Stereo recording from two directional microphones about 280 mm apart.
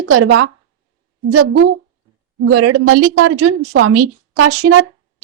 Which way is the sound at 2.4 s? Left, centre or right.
Right.